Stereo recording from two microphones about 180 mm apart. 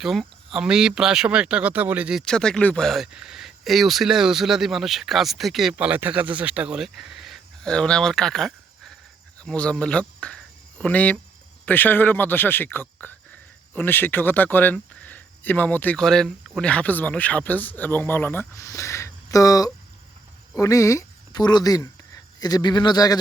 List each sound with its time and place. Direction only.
0.0 s speech: centre (ahead or behind); by 23.1 s 20° left (ahead or behind)